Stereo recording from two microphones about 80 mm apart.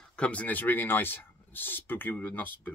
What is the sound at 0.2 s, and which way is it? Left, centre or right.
Speech, centre.